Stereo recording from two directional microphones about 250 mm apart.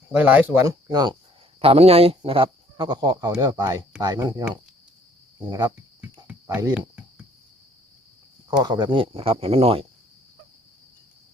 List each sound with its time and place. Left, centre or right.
0.1 s speech: centre
6.2 s cricket: centre
8.4 s speech: centre